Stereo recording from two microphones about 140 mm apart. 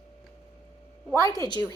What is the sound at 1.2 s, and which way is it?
Speech, 25° left (ahead or behind).